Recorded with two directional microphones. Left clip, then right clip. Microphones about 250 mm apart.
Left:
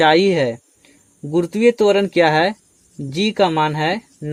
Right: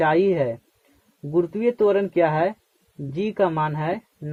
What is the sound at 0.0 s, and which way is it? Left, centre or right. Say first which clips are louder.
Speech: left 6 dB; left.